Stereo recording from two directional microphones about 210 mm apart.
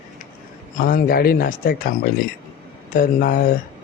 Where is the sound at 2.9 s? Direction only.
40° left (ahead or behind).